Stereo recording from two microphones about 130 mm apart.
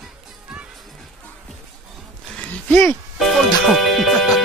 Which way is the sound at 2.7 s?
20° left (ahead or behind).